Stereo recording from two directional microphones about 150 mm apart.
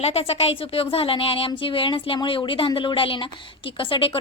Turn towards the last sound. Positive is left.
turn(degrees=35)  # may be behind; listen again after turning